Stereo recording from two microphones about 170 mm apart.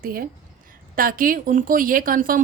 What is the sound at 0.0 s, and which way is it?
Speech, 60° right (ahead or behind).